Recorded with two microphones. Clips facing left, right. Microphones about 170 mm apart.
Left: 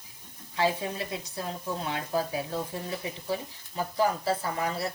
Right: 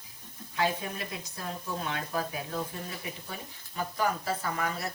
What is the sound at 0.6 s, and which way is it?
A woman's voice, 30° left (ahead or behind).